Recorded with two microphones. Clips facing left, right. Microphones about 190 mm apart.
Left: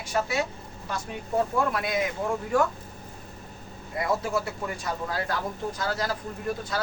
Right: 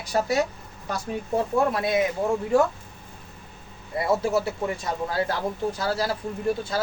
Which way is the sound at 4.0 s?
25° right (ahead or behind).